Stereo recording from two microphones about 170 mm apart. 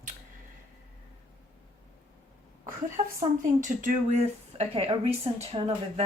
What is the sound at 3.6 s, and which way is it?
Speech, 45° right (ahead or behind).